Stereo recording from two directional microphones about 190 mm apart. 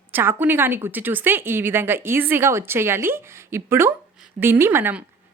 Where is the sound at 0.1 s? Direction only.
10° right (ahead or behind).